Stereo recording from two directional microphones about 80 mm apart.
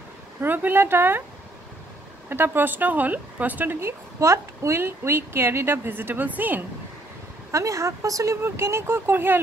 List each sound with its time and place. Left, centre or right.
0.4 s a woman's voice: right
2.2 s a woman's voice: right
4.2 s a woman's voice: right
7.5 s speech: right